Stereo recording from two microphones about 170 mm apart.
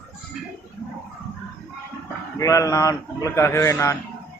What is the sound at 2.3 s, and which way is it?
Speech, 20° left (ahead or behind).